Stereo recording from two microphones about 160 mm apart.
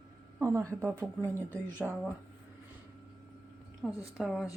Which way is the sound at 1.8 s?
Centre (ahead or behind).